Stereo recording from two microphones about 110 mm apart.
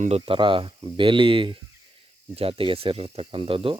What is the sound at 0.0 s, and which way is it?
Speech, 70° right (ahead or behind).